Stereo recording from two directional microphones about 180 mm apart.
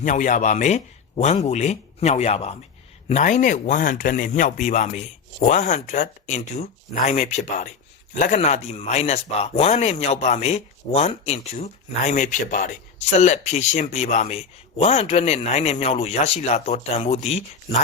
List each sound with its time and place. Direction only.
0.0 s speech: 45° left (ahead or behind)